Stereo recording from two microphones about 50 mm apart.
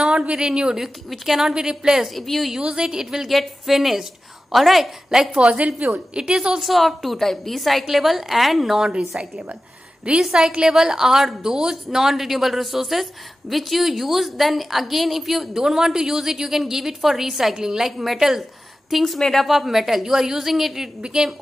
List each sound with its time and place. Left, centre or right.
0.0 s speech: centre
1.1 s speech: centre
1.5 s a woman's voice: centre
2.1 s speech: centre
2.6 s a woman's voice: centre
3.3 s a woman's voice: centre
5.8 s a woman's voice: right
6.1 s a woman's voice: centre
6.6 s speech: centre
10.1 s a woman's voice: right
10.7 s a woman's voice: centre